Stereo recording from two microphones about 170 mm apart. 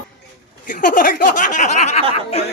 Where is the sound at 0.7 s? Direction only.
50° left (ahead or behind).